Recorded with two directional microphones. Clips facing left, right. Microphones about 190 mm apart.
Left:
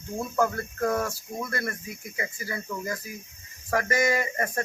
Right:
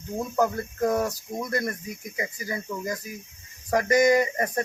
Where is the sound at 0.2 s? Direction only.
15° right (ahead or behind).